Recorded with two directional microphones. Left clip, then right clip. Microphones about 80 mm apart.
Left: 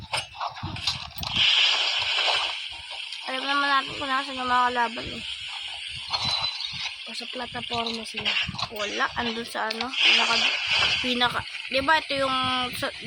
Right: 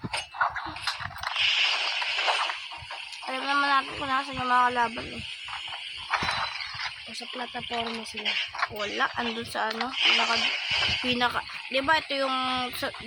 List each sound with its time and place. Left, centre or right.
0.9 s mechanisms: left
3.4 s speech: centre
6.1 s a sound: left
7.7 s stir: left
9.1 s speech: left
9.9 s speech: left
11.1 s speech: centre
11.7 s speech: centre